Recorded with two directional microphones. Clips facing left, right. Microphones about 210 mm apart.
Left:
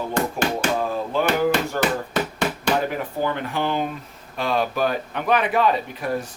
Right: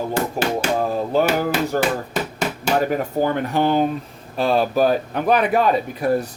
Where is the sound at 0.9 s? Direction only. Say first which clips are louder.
Right 3 dB; 40° right (ahead or behind).